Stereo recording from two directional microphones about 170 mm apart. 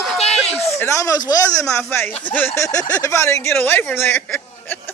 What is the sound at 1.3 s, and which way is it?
Speech, 20° left (ahead or behind).